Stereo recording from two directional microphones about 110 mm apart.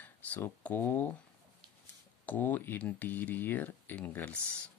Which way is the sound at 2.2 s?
15° left (ahead or behind).